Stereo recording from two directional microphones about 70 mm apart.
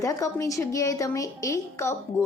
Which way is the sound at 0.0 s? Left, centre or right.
Left.